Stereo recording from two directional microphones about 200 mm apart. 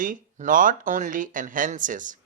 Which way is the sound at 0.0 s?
40° right (ahead or behind).